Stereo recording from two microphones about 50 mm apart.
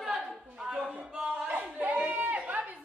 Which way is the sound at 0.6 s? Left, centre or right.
Centre.